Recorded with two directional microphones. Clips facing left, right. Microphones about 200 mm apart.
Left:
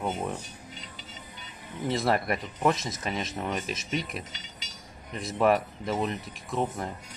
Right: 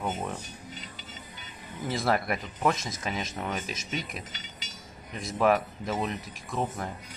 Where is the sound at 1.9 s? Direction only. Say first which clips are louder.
Left 1 dB; centre (ahead or behind).